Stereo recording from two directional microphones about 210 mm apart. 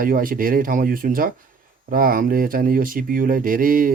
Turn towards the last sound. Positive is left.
turn(degrees=-40)  # may be behind; listen again after turning